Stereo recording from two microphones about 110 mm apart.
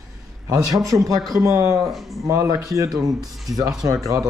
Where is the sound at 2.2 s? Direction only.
30° right (ahead or behind).